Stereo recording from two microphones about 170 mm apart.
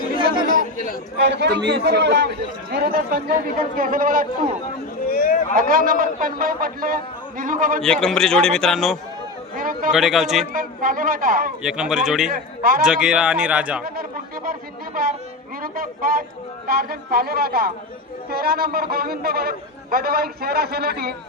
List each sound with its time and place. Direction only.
0.4 s chatter: 55° left (ahead or behind)
1.2 s a man's voice: 85° right
2.7 s a man's voice: 65° right (ahead or behind)
5.0 s a sound: 55° left (ahead or behind)
5.5 s a man's voice: 55° right (ahead or behind)
8.0 s speech: 5° left (ahead or behind)
9.6 s a man's voice: 55° right (ahead or behind)
9.9 s speech: centre (ahead or behind)
10.5 s a man's voice: 55° right (ahead or behind)
11.6 s speech: 5° right (ahead or behind)
12.3 s a man's voice: 60° right (ahead or behind)
12.8 s speech: 5° right (ahead or behind)
13.8 s a man's voice: 60° right (ahead or behind)